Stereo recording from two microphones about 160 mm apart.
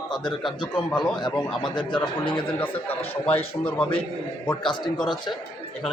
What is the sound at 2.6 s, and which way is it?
A man's voice, 10° left (ahead or behind).